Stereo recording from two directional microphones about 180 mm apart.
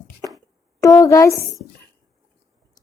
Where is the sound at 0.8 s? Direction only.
20° left (ahead or behind).